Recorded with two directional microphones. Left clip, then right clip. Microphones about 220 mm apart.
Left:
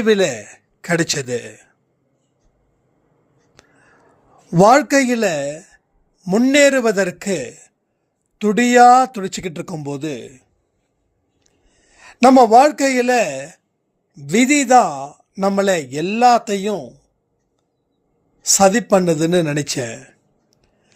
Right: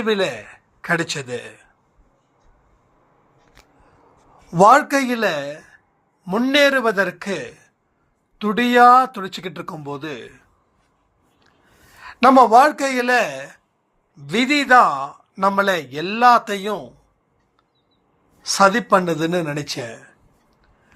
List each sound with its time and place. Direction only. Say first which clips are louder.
0.0 s a man's voice: left 5 dB; 55° left (ahead or behind)
4.6 s speech: left 1 dB; 60° left (ahead or behind)
11.9 s speech: left 1 dB; 55° left (ahead or behind)
18.4 s a man's voice: left 2 dB; 55° left (ahead or behind)